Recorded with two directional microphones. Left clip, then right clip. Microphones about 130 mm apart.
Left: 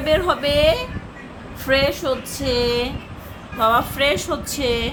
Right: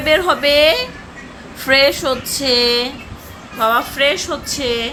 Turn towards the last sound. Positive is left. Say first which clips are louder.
# right 2 dB
turn(degrees=0)  # may be behind; listen again after turning